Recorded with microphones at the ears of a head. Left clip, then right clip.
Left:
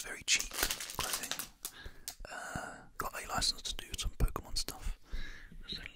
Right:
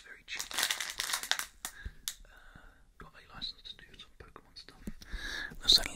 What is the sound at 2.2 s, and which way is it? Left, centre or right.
Whispering, left.